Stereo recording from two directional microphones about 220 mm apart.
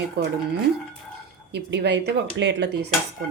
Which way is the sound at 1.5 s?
50° right (ahead or behind).